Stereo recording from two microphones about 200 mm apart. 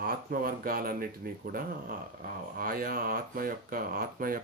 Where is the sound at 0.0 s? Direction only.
50° right (ahead or behind).